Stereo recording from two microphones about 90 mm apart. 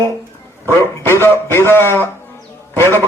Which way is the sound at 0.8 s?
25° left (ahead or behind).